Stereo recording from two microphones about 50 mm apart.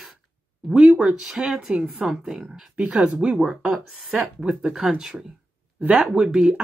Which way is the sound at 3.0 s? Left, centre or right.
Centre.